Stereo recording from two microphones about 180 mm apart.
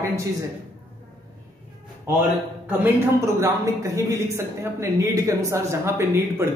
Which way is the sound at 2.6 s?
10° right (ahead or behind).